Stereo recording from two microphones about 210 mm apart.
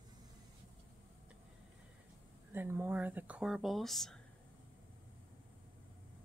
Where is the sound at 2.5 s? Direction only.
10° right (ahead or behind).